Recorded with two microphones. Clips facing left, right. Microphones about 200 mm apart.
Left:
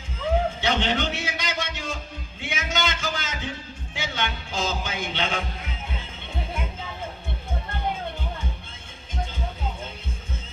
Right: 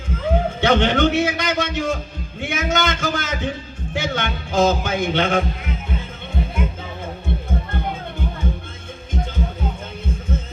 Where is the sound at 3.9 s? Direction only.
50° right (ahead or behind).